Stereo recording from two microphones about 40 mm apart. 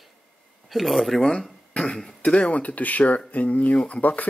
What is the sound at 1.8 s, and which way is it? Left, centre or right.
Speech, centre.